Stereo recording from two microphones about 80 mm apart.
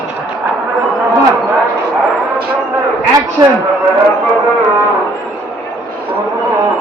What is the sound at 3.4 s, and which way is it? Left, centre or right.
Speech, right.